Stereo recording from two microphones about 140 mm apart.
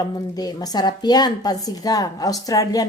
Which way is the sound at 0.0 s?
30° left (ahead or behind).